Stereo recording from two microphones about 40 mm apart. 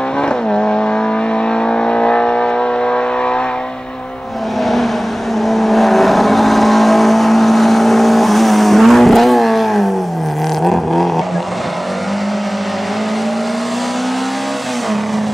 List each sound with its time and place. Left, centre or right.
0.5 s vehicle: left
5.5 s vehicle: centre